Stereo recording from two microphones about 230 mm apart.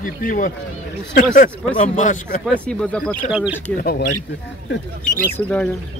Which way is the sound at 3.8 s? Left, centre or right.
Left.